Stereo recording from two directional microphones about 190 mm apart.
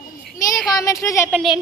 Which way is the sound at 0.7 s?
20° left (ahead or behind).